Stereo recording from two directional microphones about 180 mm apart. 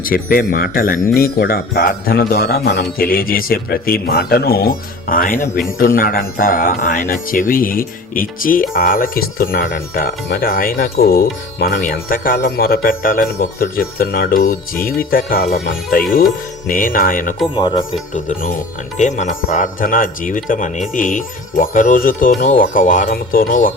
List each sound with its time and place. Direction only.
0.0 s speech: 55° left (ahead or behind)
17.5 s speech: 25° left (ahead or behind)
18.1 s speech: 45° left (ahead or behind)